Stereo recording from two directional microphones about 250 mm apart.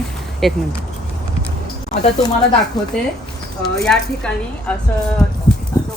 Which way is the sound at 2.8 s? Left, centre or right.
Centre.